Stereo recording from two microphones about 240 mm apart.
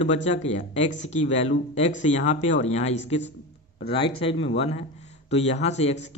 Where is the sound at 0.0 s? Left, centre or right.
Left.